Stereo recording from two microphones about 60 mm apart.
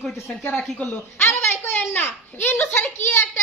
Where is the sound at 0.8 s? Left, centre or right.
Left.